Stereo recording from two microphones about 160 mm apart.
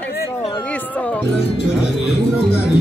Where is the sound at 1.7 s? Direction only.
Centre (ahead or behind).